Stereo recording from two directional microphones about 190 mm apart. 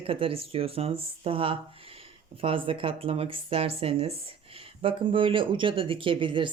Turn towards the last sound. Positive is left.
turn(degrees=-25)  # may be behind; listen again after turning